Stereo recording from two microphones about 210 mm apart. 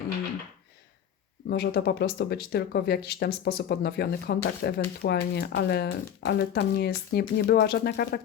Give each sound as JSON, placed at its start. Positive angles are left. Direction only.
{"t": 1.5, "sound": "speech", "side_deg": 50}